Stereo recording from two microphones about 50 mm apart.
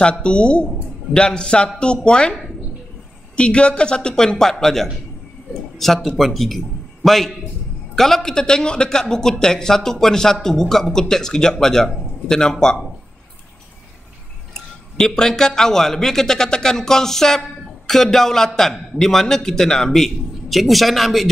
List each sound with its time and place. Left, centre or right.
0.0 s speech: left
3.3 s a man's voice: centre
14.5 s a man's voice: centre
20.4 s speech: centre